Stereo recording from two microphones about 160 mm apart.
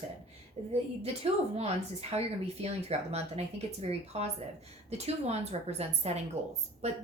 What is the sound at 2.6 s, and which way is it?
A woman's voice, 40° right (ahead or behind).